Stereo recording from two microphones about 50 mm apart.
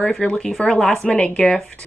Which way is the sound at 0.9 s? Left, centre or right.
Left.